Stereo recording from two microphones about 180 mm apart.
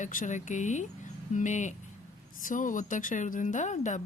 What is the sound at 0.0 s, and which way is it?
Speech, 45° left (ahead or behind).